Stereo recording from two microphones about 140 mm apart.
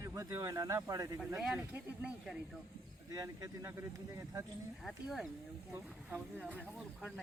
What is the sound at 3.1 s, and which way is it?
Speech, 25° right (ahead or behind).